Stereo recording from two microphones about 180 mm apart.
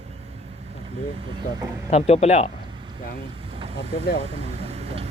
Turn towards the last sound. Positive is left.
turn(degrees=-35)  # may be behind; listen again after turning